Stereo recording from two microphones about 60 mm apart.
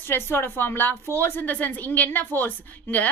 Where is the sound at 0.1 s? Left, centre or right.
Left.